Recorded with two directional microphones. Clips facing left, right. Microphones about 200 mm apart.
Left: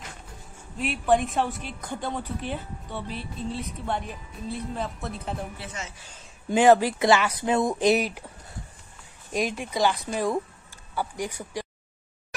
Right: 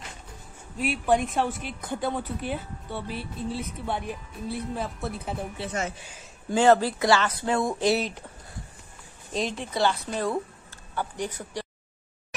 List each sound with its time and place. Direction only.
0.7 s a woman's voice: centre (ahead or behind)
5.7 s speech: 55° right (ahead or behind)
6.5 s speech: 15° left (ahead or behind)
9.3 s speech: 10° left (ahead or behind)